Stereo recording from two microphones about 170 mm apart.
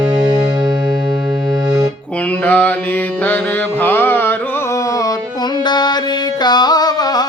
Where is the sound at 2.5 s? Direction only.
10° left (ahead or behind).